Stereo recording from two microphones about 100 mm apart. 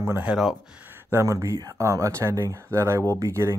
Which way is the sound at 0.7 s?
20° right (ahead or behind).